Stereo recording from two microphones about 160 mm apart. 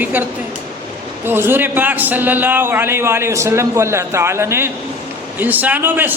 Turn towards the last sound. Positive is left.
turn(degrees=-15)  # may be behind; listen again after turning